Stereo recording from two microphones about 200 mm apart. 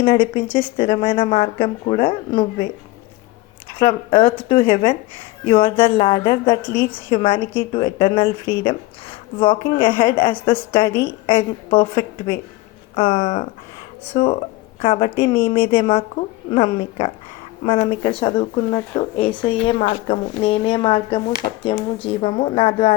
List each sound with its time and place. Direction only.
0.0 s speech: 25° left (ahead or behind)
3.8 s speech: 25° left (ahead or behind)
6.6 s a woman's voice: 10° left (ahead or behind)
6.9 s speech: 25° left (ahead or behind)